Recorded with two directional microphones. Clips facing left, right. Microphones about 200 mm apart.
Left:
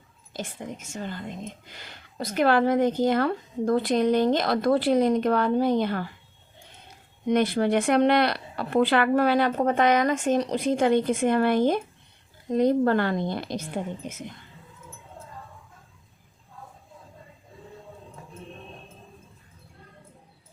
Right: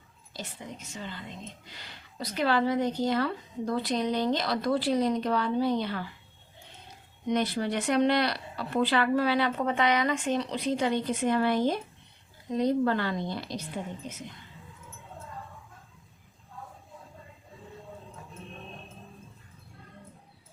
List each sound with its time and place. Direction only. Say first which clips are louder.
0.3 s speech: left 6 dB; 50° left (ahead or behind)
7.3 s speech: left 6 dB; 55° left (ahead or behind)